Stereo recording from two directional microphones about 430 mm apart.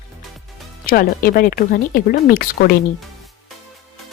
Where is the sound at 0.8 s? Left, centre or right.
Centre.